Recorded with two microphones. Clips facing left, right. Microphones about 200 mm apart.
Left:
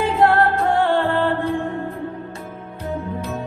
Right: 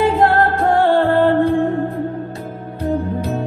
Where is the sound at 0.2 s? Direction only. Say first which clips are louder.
Right 2 dB; 40° right (ahead or behind).